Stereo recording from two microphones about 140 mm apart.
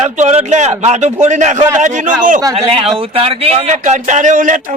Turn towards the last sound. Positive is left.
turn(degrees=-70)  # may be behind; listen again after turning